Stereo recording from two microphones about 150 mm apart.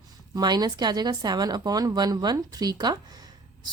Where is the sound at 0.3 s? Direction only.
25° right (ahead or behind).